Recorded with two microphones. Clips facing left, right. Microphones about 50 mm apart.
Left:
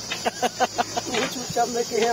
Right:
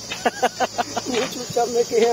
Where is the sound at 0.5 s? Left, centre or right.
Centre.